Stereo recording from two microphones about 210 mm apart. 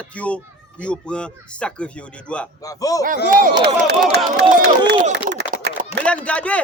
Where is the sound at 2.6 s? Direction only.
15° left (ahead or behind).